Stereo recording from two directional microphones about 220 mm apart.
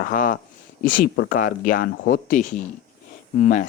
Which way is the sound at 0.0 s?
40° left (ahead or behind).